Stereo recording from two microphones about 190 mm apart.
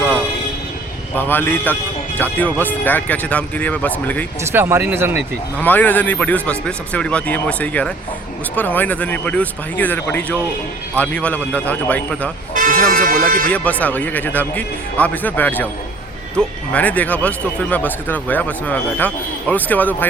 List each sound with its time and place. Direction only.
1.1 s speech: 10° left (ahead or behind)
4.5 s speech: 10° right (ahead or behind)
5.5 s speech: 10° left (ahead or behind)
12.5 s speech: 45° right (ahead or behind)
13.5 s speech: 5° left (ahead or behind)